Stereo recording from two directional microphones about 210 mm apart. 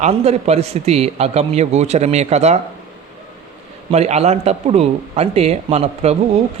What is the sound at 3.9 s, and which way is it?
A man's voice, 30° right (ahead or behind).